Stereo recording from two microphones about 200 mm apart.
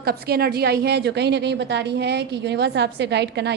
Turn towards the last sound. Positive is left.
turn(degrees=-60)  # may be behind; listen again after turning